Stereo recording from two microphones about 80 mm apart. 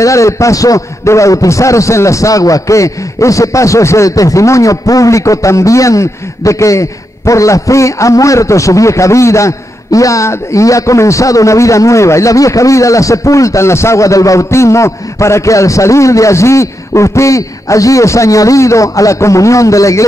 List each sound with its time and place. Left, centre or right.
0.0 s a man's voice: left